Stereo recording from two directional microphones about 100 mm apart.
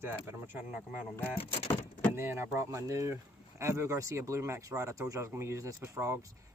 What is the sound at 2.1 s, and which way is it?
Speech, 25° right (ahead or behind).